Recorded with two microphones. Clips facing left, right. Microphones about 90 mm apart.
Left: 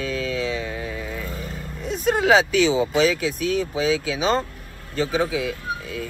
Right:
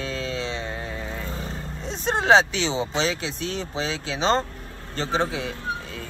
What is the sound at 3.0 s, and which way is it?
Speech, 30° right (ahead or behind).